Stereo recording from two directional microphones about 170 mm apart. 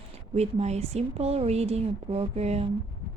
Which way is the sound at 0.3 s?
40° right (ahead or behind).